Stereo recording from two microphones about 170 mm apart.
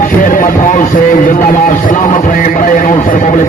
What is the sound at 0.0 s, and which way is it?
Speech, 50° left (ahead or behind).